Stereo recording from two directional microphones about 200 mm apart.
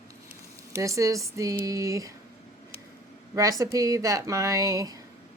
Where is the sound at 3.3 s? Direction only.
15° right (ahead or behind).